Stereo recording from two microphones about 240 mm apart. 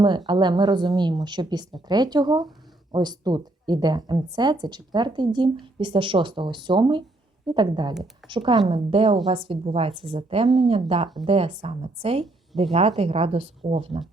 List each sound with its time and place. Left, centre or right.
0.3 s a woman's voice: centre